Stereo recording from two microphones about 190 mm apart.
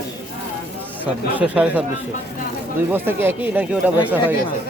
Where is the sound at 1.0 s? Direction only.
10° right (ahead or behind).